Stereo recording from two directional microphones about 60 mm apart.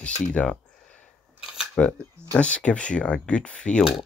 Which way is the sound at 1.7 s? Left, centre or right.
Centre.